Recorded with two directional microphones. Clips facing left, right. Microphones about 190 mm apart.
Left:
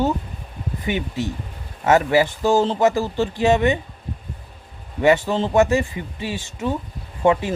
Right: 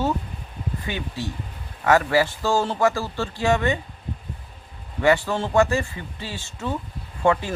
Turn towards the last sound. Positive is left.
turn(degrees=20)  # may be behind; listen again after turning